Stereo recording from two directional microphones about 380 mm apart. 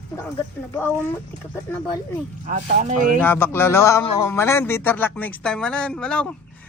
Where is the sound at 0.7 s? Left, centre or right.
Centre.